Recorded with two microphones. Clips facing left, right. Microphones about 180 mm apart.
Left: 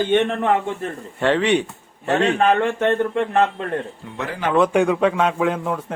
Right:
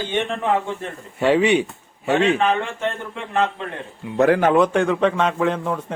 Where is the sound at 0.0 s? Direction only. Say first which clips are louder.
Left 5 dB; 60° left (ahead or behind).